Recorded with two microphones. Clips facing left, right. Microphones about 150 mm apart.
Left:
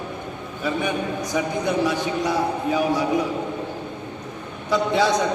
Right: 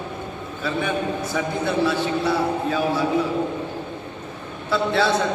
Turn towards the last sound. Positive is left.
turn(degrees=15)  # may be behind; listen again after turning